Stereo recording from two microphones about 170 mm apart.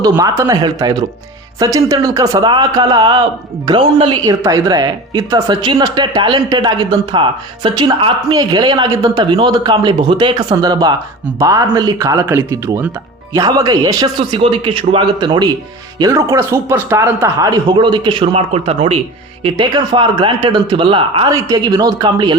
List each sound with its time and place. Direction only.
0.2 s speech: 20° right (ahead or behind)